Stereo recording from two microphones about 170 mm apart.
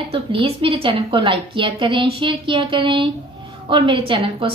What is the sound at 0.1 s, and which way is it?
A woman's voice, 30° right (ahead or behind).